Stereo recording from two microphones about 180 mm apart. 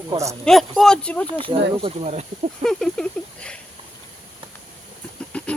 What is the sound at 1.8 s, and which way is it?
Speech, 35° right (ahead or behind).